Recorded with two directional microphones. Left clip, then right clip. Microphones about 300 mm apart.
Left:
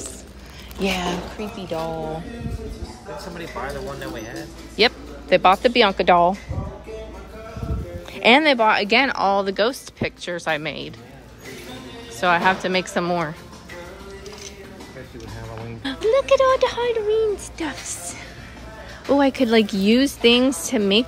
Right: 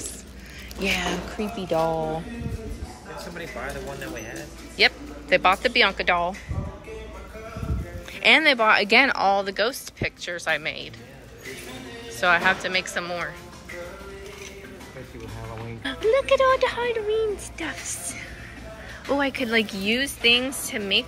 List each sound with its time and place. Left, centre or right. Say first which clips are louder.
0.7 s speech: left 2 dB; centre
1.4 s speech: right 7 dB; centre
4.7 s speech: left 2 dB; centre
8.1 s speech: left 2 dB; centre
12.2 s speech: left 2 dB; centre
15.8 s speech: left 2 dB; centre